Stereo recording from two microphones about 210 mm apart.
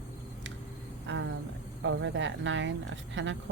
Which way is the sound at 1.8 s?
60° right (ahead or behind).